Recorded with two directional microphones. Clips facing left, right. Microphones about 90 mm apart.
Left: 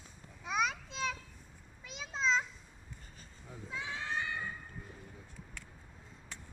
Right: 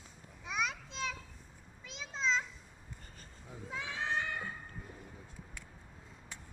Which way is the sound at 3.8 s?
70° right (ahead or behind).